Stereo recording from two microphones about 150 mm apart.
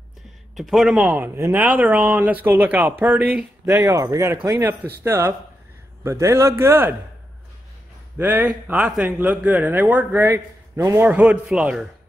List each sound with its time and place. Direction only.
0.6 s a man's voice: centre (ahead or behind)
8.2 s speech: 10° right (ahead or behind)
11.1 s speech: 10° right (ahead or behind)